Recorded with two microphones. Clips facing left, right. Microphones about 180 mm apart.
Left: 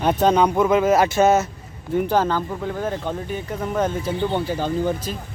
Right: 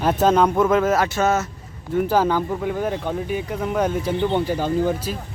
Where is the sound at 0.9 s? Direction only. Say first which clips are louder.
Left 4 dB; 20° left (ahead or behind).